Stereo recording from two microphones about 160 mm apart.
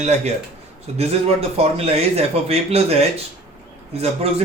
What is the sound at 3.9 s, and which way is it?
Speech, 40° right (ahead or behind).